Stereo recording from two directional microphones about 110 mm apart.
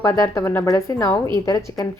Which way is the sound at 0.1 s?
30° left (ahead or behind).